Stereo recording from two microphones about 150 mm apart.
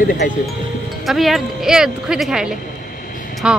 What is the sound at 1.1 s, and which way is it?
Speech, centre (ahead or behind).